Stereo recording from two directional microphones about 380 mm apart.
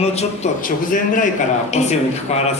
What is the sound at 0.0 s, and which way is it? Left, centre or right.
Speech, centre.